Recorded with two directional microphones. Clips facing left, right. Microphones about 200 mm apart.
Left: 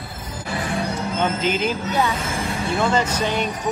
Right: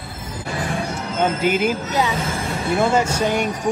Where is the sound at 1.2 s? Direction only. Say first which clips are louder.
Right 4 dB; 10° right (ahead or behind).